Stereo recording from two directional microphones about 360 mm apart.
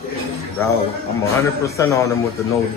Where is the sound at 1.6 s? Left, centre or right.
Centre.